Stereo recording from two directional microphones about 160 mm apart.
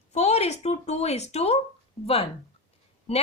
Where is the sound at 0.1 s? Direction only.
45° left (ahead or behind).